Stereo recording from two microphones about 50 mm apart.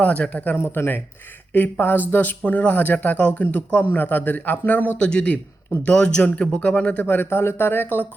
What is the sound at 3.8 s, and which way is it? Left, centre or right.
Speech, left.